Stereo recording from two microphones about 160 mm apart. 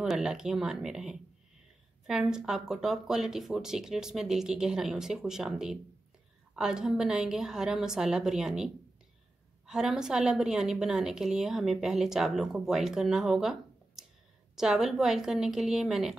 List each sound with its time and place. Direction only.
0.0 s a woman's voice: 5° right (ahead or behind)